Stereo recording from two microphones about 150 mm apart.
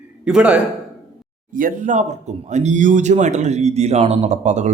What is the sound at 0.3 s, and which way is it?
Speech, 5° right (ahead or behind).